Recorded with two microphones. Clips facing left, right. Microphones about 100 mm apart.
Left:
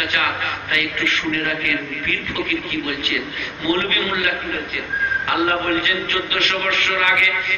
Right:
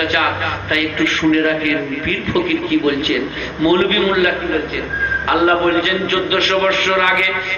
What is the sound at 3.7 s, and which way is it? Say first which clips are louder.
A man's voice: right 6 dB; 35° right (ahead or behind).